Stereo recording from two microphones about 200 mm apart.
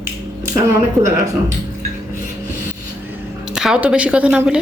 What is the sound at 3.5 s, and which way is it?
Speech, 5° right (ahead or behind).